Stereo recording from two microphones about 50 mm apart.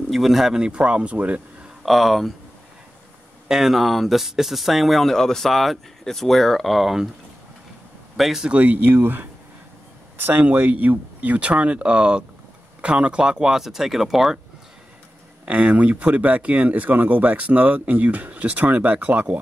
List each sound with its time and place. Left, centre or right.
0.1 s speech: centre
0.6 s speech: centre
1.8 s speech: centre
3.4 s speech: centre
8.2 s speech: centre
8.5 s speech: right; by 14.4 s centre
15.4 s speech: right